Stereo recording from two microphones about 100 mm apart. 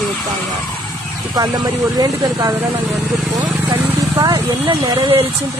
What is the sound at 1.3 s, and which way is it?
Speech, 40° right (ahead or behind).